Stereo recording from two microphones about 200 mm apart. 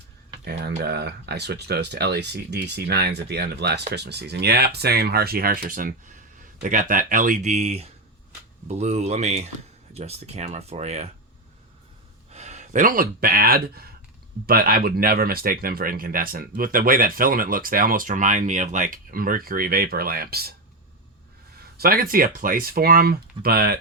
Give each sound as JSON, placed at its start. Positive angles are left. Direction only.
{"t": 0.8, "sound": "speech", "side_deg": -55}
{"t": 12.3, "sound": "speech", "side_deg": -35}
{"t": 21.8, "sound": "speech", "side_deg": -45}